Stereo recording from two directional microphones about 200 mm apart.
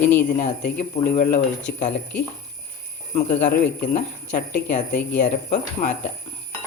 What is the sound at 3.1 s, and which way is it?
Speech, 40° left (ahead or behind).